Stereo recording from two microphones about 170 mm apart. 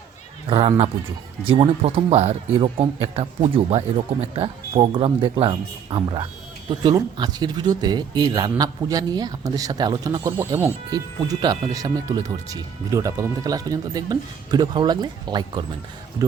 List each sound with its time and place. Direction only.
0.4 s speech: 35° right (ahead or behind)